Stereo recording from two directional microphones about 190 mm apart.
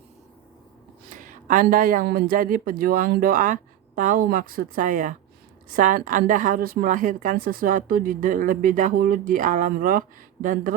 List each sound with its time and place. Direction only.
1.1 s a woman's voice: 45° right (ahead or behind)